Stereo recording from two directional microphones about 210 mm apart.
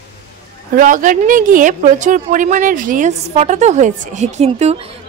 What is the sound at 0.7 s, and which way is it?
A woman's voice, 40° right (ahead or behind).